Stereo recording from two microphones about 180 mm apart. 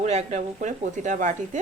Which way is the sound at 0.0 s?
40° right (ahead or behind).